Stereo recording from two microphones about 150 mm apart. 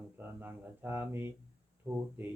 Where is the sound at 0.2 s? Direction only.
10° right (ahead or behind).